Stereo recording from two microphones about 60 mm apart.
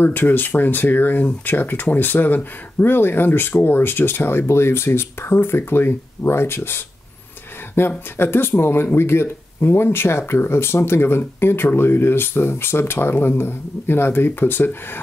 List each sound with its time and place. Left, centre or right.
0.0 s speech: left